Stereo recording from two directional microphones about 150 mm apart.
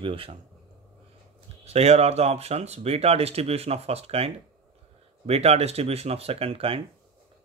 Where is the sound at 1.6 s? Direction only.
45° right (ahead or behind).